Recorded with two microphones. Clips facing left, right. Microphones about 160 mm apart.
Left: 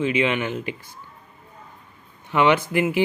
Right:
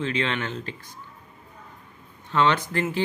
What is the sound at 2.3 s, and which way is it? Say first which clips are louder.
Speech: left 4 dB; 15° left (ahead or behind).